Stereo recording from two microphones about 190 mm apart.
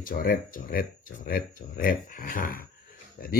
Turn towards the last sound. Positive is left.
turn(degrees=50)  # may be behind; listen again after turning